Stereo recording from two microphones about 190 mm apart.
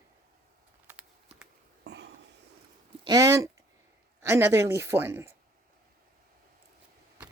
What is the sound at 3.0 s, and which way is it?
Speech, 20° right (ahead or behind).